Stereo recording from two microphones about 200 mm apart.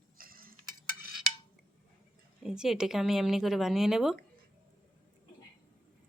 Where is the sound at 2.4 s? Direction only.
5° right (ahead or behind).